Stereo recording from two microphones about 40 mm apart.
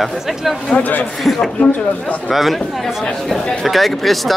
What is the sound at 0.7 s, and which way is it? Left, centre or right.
Speech, left.